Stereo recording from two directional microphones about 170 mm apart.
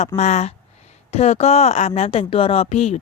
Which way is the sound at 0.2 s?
40° left (ahead or behind).